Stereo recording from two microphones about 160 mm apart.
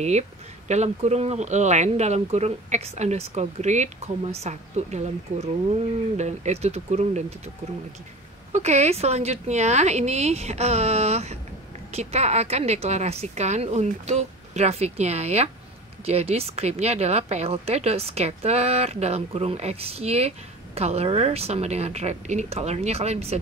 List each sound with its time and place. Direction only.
0.7 s speech: 45° right (ahead or behind)
8.5 s a woman's voice: 45° right (ahead or behind)